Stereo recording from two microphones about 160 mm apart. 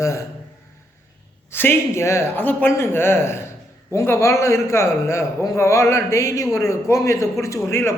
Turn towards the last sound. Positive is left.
turn(degrees=15)  # may be behind; listen again after turning